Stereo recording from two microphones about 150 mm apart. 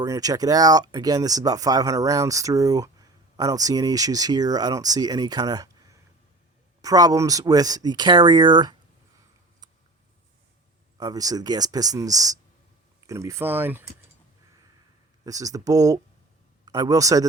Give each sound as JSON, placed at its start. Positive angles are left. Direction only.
{"t": 0.0, "sound": "speech", "side_deg": -25}
{"t": 10.9, "sound": "speech", "side_deg": -25}
{"t": 15.2, "sound": "speech", "side_deg": -25}